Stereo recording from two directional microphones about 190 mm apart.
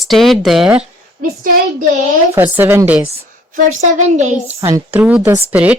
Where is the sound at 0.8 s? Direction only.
45° right (ahead or behind).